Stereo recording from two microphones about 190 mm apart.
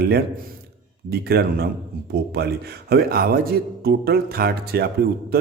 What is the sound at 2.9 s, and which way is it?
A man's voice, 55° right (ahead or behind).